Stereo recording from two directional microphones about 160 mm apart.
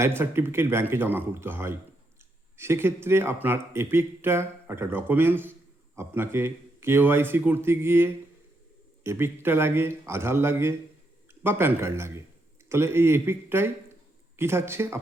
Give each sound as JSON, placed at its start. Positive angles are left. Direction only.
{"t": 0.0, "sound": "speech", "side_deg": -15}